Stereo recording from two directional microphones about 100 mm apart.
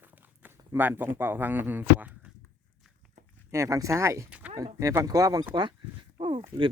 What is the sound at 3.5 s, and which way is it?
Speech, 30° right (ahead or behind).